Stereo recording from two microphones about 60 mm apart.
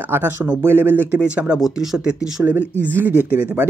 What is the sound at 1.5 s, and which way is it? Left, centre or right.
Speech, centre.